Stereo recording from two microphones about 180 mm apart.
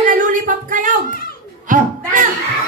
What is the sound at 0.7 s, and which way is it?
Speech, 45° right (ahead or behind).